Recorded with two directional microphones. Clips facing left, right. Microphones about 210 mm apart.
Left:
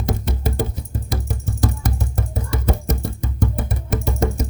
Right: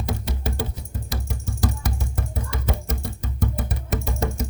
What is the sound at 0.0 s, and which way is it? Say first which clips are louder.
Music: left 4 dB; 50° left (ahead or behind).